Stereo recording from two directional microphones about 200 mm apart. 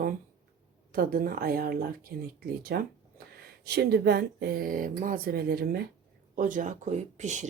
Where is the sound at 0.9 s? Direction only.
45° right (ahead or behind).